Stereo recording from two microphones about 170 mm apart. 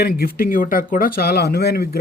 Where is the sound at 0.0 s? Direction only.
60° left (ahead or behind).